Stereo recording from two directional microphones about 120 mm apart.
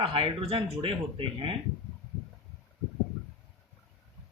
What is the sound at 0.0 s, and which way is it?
Speech, 45° right (ahead or behind).